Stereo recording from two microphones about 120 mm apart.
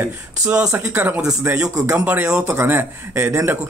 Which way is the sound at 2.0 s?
15° right (ahead or behind).